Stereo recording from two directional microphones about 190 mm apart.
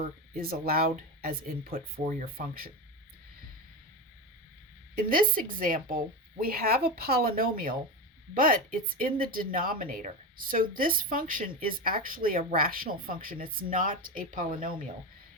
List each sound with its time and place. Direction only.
0.3 s speech: 50° right (ahead or behind)
4.9 s speech: 50° right (ahead or behind)